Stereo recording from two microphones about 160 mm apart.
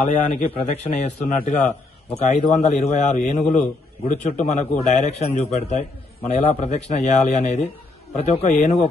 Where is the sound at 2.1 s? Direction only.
40° left (ahead or behind).